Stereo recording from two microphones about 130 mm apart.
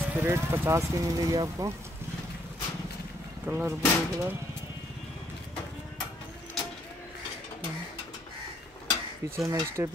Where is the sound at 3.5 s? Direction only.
15° right (ahead or behind).